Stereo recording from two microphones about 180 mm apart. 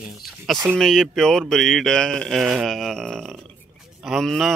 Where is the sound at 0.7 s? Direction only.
Centre (ahead or behind).